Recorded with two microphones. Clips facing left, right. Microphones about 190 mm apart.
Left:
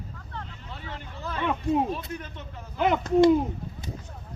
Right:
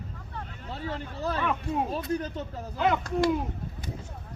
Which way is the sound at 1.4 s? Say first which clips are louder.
Left 7 dB; 20° left (ahead or behind).